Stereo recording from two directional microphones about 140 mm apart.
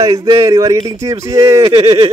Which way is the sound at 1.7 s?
40° right (ahead or behind).